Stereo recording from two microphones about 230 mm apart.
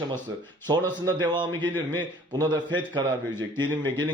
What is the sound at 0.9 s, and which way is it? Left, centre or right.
Speech, centre.